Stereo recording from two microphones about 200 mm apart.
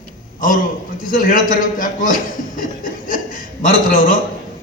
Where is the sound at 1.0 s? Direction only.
40° left (ahead or behind).